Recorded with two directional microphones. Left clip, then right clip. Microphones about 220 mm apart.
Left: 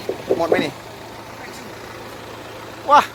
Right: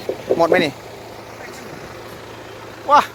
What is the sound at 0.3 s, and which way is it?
Speech, 45° right (ahead or behind).